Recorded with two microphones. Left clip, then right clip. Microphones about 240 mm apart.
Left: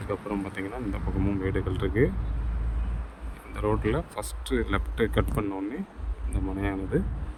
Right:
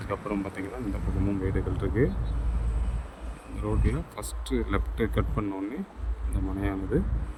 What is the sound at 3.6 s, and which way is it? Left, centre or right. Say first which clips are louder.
Speech: left 6 dB; centre.